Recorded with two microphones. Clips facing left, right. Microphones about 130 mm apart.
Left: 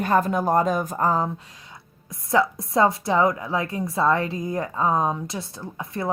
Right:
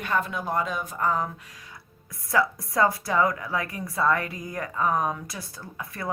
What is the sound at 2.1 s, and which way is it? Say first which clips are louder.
A woman's voice: left 3 dB; 25° left (ahead or behind).